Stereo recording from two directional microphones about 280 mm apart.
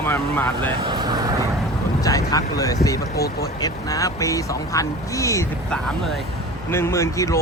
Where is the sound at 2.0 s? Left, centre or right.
Centre.